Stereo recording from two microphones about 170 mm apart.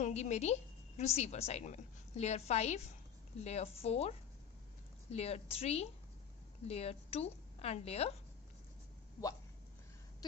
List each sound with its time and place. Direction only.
0.0 s a woman's voice: 40° left (ahead or behind)
5.1 s a woman's voice: 35° left (ahead or behind)